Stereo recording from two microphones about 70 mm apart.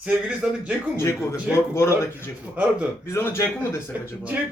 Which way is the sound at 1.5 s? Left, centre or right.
Centre.